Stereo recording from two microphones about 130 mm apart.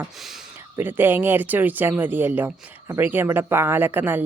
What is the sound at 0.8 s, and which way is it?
Speech, 15° right (ahead or behind).